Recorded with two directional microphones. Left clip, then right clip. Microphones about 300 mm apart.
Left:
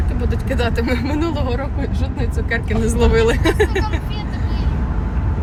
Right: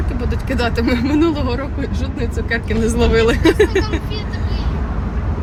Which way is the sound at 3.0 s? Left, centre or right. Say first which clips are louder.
Right 2 dB; centre.